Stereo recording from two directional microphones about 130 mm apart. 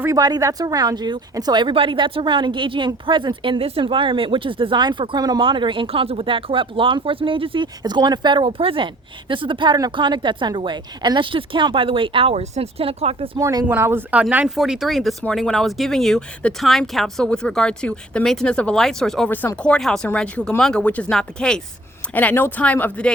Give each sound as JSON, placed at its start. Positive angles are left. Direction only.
{"t": 0.0, "sound": "speech", "side_deg": -25}
{"t": 13.4, "sound": "speech", "side_deg": -30}
{"t": 13.7, "sound": "speech", "side_deg": -15}
{"t": 19.3, "sound": "speech", "side_deg": 15}